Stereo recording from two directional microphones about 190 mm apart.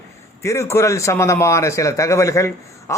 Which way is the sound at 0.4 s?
15° left (ahead or behind).